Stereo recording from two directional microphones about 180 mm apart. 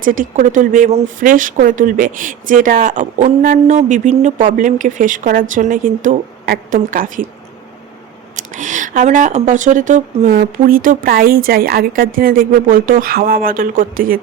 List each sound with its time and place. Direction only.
0.0 s speech: 50° right (ahead or behind)
8.4 s speech: 45° right (ahead or behind)